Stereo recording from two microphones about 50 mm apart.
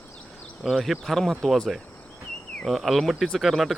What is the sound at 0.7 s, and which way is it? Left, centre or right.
Speech, centre.